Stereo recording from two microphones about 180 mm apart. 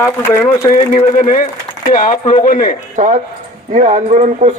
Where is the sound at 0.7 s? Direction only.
50° left (ahead or behind).